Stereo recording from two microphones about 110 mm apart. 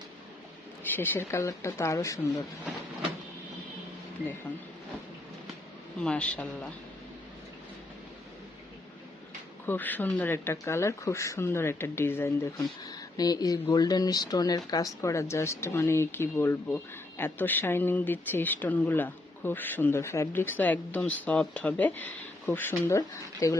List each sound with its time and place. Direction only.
0.9 s speech: 20° left (ahead or behind)
6.0 s speech: 10° left (ahead or behind)
9.6 s speech: 15° left (ahead or behind)
12.9 s speech: 35° left (ahead or behind); by 23.0 s 20° left (ahead or behind)
23.0 s speech: 30° left (ahead or behind)